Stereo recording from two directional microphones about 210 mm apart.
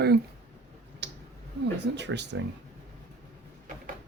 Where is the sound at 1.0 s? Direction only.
55° right (ahead or behind).